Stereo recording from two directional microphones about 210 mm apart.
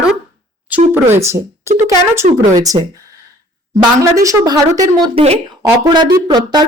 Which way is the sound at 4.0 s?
15° right (ahead or behind).